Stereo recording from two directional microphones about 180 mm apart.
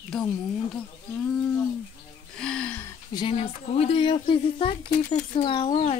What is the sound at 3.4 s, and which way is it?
Speech, 35° left (ahead or behind).